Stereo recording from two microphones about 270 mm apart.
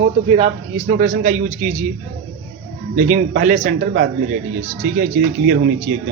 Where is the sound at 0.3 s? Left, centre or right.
Right.